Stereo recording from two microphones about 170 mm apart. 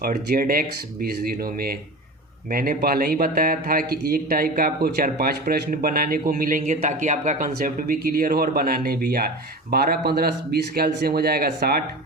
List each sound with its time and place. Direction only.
0.0 s speech: 60° right (ahead or behind)